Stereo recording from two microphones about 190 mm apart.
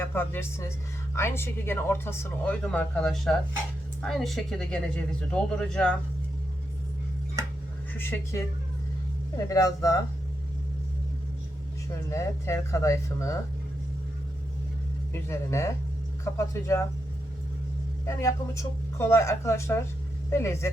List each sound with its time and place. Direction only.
0.0 s speech: 10° left (ahead or behind)
7.9 s speech: 10° left (ahead or behind)
9.5 s speech: 20° left (ahead or behind)
12.1 s speech: 15° left (ahead or behind)
15.1 s speech: 15° left (ahead or behind)
18.0 s speech: 15° left (ahead or behind)